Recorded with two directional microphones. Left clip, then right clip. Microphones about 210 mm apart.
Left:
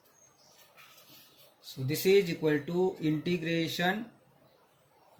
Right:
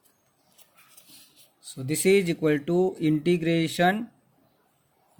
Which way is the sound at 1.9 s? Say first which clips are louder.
Right 4 dB; 40° right (ahead or behind).